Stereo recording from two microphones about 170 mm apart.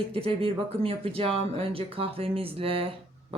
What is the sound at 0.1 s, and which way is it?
Speech, 35° right (ahead or behind).